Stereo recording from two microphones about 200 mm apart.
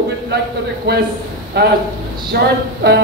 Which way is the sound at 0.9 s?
55° right (ahead or behind).